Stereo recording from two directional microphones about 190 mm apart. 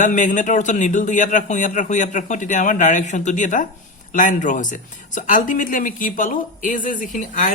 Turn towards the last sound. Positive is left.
turn(degrees=45)  # may be behind; listen again after turning